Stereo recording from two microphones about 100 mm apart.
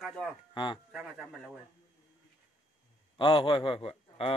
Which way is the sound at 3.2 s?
60° left (ahead or behind).